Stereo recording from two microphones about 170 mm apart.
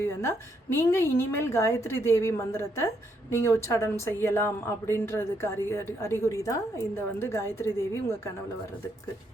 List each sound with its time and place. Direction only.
0.2 s a woman's voice: 15° left (ahead or behind)